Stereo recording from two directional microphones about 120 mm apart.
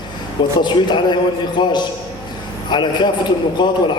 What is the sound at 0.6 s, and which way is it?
A man's voice, 40° left (ahead or behind).